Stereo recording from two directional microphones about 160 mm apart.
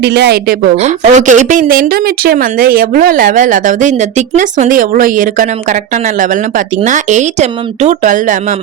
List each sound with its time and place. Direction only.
0.0 s a woman's voice: 90° right
0.8 s speech: 45° right (ahead or behind)
6.8 s speech: 50° right (ahead or behind)